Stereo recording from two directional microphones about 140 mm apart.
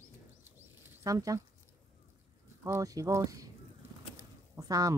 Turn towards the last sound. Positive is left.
turn(degrees=-25)  # may be behind; listen again after turning